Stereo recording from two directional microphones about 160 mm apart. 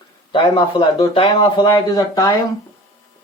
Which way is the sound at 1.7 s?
20° left (ahead or behind).